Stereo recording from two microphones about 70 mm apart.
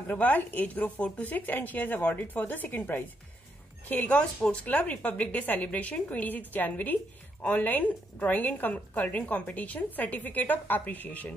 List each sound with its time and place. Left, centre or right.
0.1 s a woman's voice: left